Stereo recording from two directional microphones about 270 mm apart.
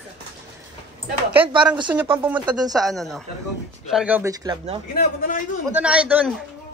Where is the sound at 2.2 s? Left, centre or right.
Centre.